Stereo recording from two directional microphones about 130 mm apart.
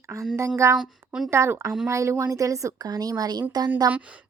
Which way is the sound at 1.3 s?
20° right (ahead or behind).